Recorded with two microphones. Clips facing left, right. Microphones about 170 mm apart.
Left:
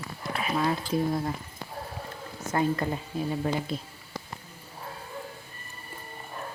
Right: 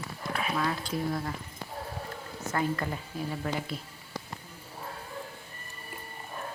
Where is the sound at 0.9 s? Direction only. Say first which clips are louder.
Left 8 dB; 25° left (ahead or behind).